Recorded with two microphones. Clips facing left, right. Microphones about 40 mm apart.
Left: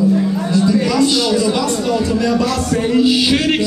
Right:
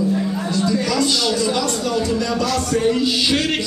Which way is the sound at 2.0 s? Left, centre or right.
Centre.